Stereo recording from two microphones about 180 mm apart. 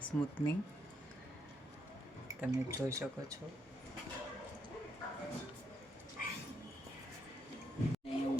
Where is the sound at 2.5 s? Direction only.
15° right (ahead or behind).